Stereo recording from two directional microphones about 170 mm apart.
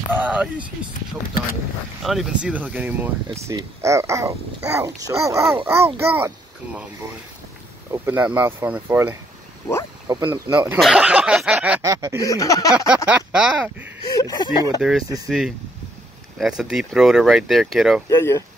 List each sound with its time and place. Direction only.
0.1 s speech: 10° right (ahead or behind)
2.0 s speech: centre (ahead or behind)
7.9 s speech: 15° right (ahead or behind)
10.2 s speech: 20° right (ahead or behind)
10.8 s speech: 5° right (ahead or behind)
11.8 s speech: 20° right (ahead or behind)
12.2 s speech: 20° left (ahead or behind)
12.9 s speech: 5° right (ahead or behind)
14.0 s speech: 20° left (ahead or behind)
14.8 s speech: centre (ahead or behind)
18.1 s speech: 15° left (ahead or behind)